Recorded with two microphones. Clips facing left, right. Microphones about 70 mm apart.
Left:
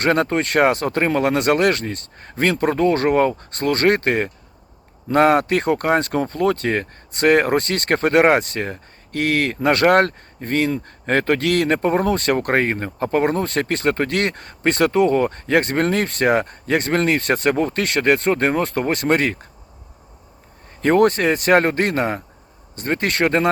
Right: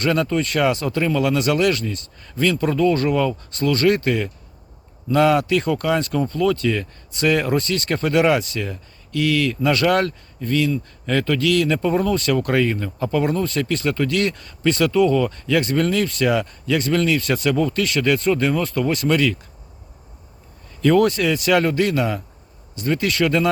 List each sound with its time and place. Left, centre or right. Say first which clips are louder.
0.0 s speech: left 2 dB; left
20.8 s speech: left 1 dB; left